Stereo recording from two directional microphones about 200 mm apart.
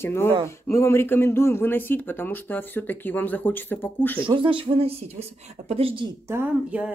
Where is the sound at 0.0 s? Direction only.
10° left (ahead or behind).